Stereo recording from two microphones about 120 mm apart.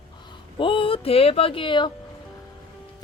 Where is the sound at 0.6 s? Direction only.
45° left (ahead or behind).